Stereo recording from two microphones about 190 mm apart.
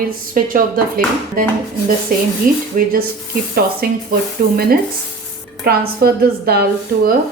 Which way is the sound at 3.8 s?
50° right (ahead or behind).